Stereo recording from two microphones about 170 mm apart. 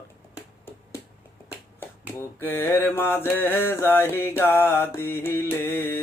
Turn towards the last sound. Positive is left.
turn(degrees=15)  # may be behind; listen again after turning